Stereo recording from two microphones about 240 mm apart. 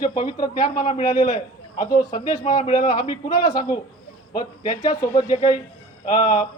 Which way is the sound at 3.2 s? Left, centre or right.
Centre.